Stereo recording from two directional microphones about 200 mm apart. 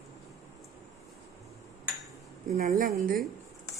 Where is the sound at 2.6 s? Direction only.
40° right (ahead or behind).